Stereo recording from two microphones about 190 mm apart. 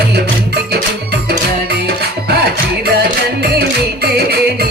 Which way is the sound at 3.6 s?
55° right (ahead or behind).